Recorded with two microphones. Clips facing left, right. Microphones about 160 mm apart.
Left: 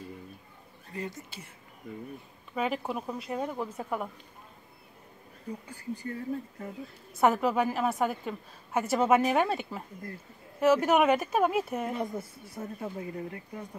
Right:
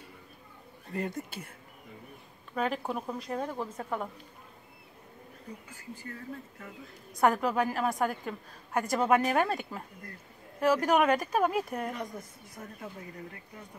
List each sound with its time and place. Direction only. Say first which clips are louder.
0.9 s speech: right 4 dB; 55° right (ahead or behind)
2.5 s a woman's voice: left 1 dB; 5° left (ahead or behind)
6.0 s speech: left 7 dB; 30° left (ahead or behind)
7.2 s a woman's voice: left 1 dB; 5° left (ahead or behind)
11.9 s speech: left 5 dB; 30° left (ahead or behind)